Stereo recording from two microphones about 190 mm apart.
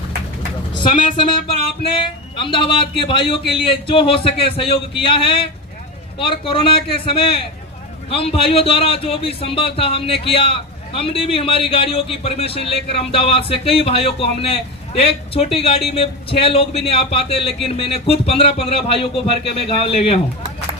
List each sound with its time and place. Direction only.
1.1 s speech: 30° left (ahead or behind)